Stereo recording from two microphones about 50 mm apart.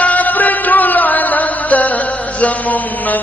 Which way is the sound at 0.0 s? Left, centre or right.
Left.